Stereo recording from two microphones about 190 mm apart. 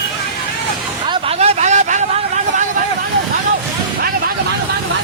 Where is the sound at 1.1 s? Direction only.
35° right (ahead or behind).